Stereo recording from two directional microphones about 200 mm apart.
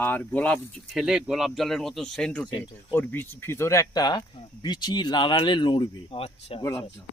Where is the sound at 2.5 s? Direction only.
15° left (ahead or behind).